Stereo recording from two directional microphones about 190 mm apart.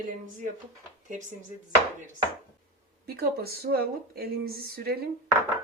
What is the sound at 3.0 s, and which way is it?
A woman's voice, 55° right (ahead or behind).